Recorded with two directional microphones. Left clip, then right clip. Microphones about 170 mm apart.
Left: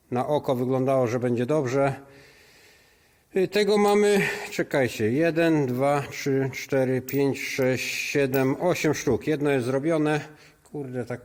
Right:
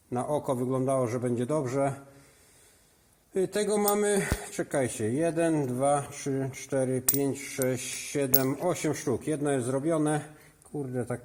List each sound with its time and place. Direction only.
0.1 s speech: 35° left (ahead or behind)
3.3 s speech: 35° left (ahead or behind); by 10.2 s 15° left (ahead or behind)
10.8 s speech: 5° right (ahead or behind)